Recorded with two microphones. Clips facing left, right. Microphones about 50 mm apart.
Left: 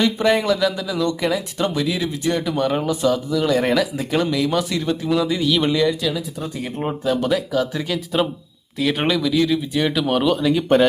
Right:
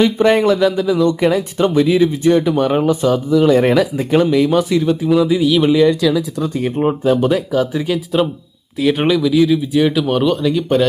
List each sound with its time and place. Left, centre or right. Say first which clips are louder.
0.0 s speech: right 6 dB; right; by 6.2 s centre
6.7 s speech: right 6 dB; centre